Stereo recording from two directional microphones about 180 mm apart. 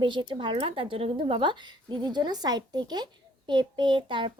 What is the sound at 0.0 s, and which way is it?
Speech, 25° right (ahead or behind).